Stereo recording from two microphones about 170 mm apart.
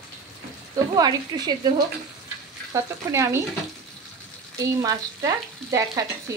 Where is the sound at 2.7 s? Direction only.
15° right (ahead or behind).